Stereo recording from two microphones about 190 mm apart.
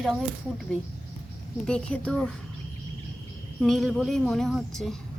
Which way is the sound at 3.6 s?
Centre (ahead or behind).